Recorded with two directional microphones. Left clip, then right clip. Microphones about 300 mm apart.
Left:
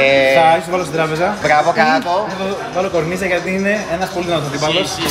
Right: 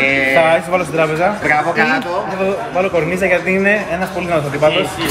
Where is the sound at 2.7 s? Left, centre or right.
Centre.